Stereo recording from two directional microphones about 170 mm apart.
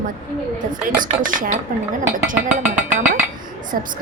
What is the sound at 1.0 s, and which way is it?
Speech, 50° right (ahead or behind).